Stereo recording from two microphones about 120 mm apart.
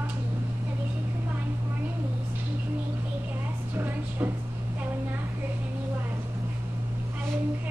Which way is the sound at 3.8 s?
15° right (ahead or behind).